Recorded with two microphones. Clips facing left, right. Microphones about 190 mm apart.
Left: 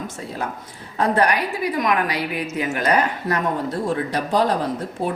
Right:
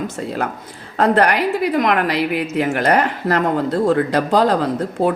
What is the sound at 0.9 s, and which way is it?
A woman's voice, 70° right (ahead or behind).